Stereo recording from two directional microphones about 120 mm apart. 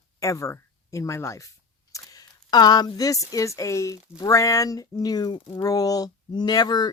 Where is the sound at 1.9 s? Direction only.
35° left (ahead or behind).